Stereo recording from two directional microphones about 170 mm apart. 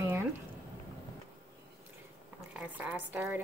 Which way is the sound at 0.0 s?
15° right (ahead or behind).